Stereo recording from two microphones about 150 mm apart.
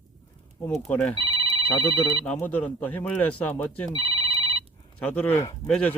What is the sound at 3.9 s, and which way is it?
Telephone bell ringing, 30° right (ahead or behind).